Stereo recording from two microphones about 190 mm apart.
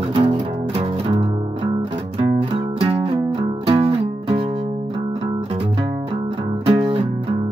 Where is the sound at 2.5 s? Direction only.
30° right (ahead or behind).